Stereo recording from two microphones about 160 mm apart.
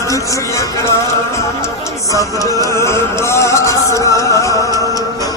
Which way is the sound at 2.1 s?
20° left (ahead or behind).